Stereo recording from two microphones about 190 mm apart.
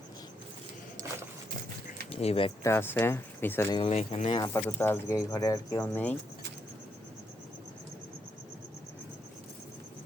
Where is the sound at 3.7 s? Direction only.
30° left (ahead or behind).